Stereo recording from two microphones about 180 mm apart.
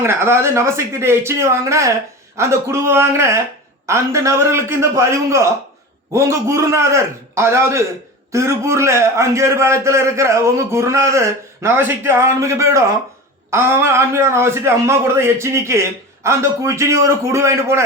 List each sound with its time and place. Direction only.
0.0 s a man's voice: 15° right (ahead or behind)